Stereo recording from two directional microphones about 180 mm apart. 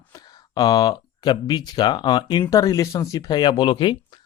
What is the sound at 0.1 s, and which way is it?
Speech, 20° left (ahead or behind).